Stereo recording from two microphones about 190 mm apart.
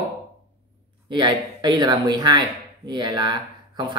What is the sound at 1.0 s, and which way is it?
Speech, 25° right (ahead or behind).